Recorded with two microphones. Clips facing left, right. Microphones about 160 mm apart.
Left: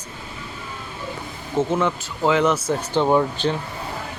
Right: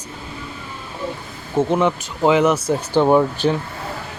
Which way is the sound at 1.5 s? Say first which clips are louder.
Right 3 dB; 15° right (ahead or behind).